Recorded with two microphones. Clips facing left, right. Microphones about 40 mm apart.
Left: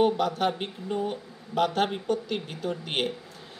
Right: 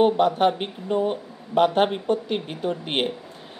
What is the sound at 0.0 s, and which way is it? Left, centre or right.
Speech, right.